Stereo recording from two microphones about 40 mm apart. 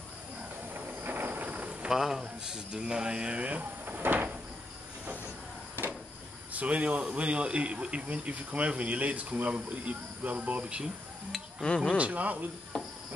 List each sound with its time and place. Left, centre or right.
0.7 s a sound: right
1.9 s speech: centre; by 3.6 s right
3.8 s cupboard open or close: right
6.5 s speech: right
11.6 s speech: left
12.0 s speech: right